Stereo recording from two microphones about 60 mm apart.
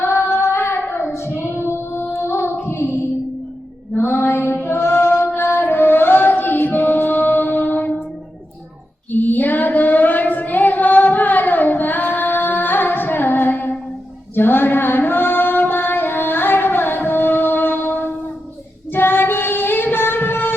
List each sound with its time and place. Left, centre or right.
0.0 s female singing: left
1.1 s child singing: left
3.9 s mantra: left
4.6 s singing: left
9.1 s chant: left
14.3 s a sound: left
18.9 s female singing: left